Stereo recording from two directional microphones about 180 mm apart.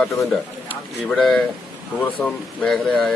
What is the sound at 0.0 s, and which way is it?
Speech, 5° left (ahead or behind).